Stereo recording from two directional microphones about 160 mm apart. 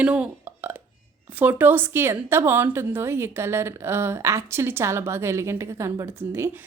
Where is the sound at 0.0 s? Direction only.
5° right (ahead or behind).